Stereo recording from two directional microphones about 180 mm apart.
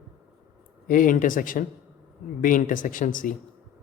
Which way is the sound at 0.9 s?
50° left (ahead or behind).